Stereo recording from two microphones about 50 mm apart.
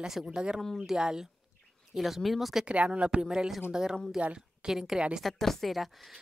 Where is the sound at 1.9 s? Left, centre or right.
Centre.